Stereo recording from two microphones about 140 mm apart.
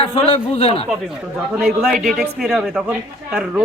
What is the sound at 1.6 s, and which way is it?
A man's voice, 5° right (ahead or behind).